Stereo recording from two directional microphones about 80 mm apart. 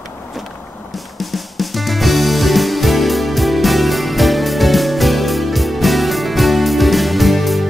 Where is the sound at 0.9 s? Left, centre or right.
Centre.